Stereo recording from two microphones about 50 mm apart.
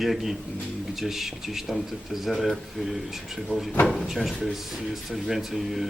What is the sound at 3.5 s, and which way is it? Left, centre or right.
Speech, left.